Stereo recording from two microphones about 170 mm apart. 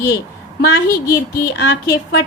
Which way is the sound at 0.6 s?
75° left (ahead or behind).